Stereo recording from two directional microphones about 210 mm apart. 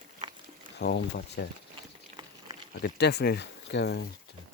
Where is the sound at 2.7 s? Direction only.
50° left (ahead or behind).